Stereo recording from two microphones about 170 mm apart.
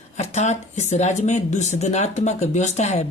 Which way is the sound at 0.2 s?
40° left (ahead or behind).